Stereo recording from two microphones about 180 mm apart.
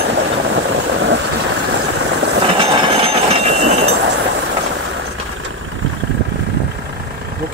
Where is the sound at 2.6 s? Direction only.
30° right (ahead or behind).